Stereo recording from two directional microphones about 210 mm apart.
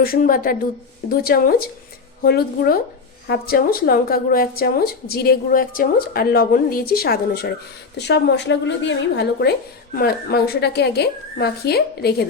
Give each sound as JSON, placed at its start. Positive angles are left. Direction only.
{"t": 0.0, "sound": "a woman's voice", "side_deg": 45}